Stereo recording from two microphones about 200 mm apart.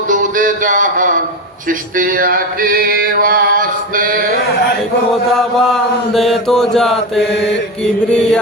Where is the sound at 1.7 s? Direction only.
40° right (ahead or behind).